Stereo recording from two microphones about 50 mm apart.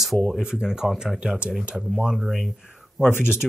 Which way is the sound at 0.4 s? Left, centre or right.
Centre.